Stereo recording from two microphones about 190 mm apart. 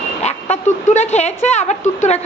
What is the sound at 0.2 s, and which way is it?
Speech, 35° left (ahead or behind).